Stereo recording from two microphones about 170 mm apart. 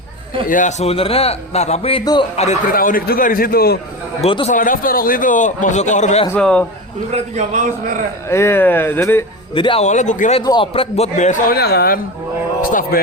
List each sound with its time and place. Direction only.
0.4 s a man's voice: 50° left (ahead or behind)
2.7 s a man's voice: 60° left (ahead or behind)
4.2 s a man's voice: 35° left (ahead or behind)
4.5 s a man's voice: 55° left (ahead or behind)
6.2 s speech: 10° left (ahead or behind)
7.1 s a man's voice: 45° right (ahead or behind)
8.3 s speech: 15° left (ahead or behind)
9.6 s a man's voice: 30° left (ahead or behind)
9.8 s a man's voice: 45° left (ahead or behind)
10.4 s a man's voice: 25° left (ahead or behind); by 11.5 s 45° left (ahead or behind)
11.5 s a man's voice: 65° left (ahead or behind)